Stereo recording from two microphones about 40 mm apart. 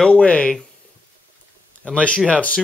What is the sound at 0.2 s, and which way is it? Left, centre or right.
Speech, left.